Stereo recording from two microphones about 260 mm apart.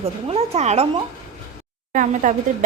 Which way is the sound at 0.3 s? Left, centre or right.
Right.